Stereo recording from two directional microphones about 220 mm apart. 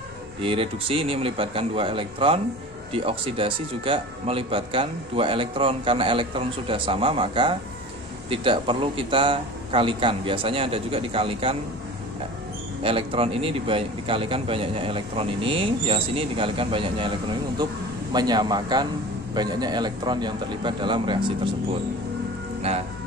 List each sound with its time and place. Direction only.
0.4 s speech: 25° right (ahead or behind)
12.8 s speech: 25° right (ahead or behind)
18.1 s speech: 20° right (ahead or behind)
22.7 s speech: 30° right (ahead or behind)